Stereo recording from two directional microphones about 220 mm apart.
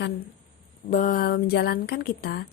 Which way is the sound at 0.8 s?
35° left (ahead or behind).